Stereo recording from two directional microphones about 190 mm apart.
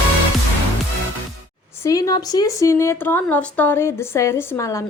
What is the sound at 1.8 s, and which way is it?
A woman's voice, 20° left (ahead or behind).